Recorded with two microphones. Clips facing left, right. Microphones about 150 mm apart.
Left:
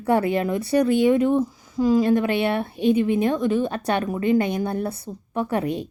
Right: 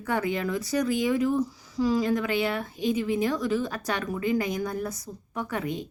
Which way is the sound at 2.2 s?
65° left (ahead or behind).